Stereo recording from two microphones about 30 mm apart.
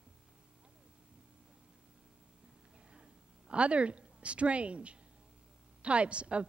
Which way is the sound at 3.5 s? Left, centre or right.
Right.